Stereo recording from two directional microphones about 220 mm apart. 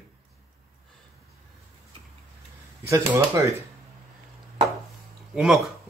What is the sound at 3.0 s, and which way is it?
Speech, 15° right (ahead or behind).